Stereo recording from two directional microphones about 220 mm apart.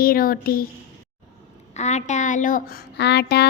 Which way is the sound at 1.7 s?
30° left (ahead or behind).